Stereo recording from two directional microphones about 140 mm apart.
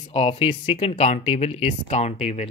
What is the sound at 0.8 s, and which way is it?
Speech, 50° left (ahead or behind).